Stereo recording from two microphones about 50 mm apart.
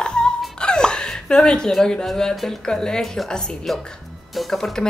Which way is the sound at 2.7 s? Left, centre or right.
Centre.